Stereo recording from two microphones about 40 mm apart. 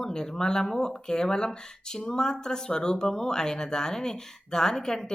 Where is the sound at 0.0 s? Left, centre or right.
Centre.